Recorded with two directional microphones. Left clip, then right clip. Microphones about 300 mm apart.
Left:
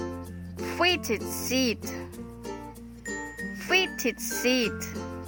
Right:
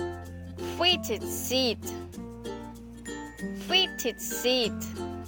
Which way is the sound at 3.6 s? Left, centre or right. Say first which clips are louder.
Left 1 dB; left.